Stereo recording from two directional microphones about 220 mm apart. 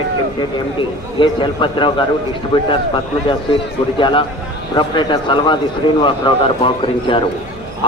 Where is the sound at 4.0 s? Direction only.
20° left (ahead or behind).